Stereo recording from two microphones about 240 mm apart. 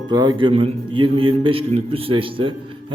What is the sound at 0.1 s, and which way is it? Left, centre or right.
A man's voice, centre.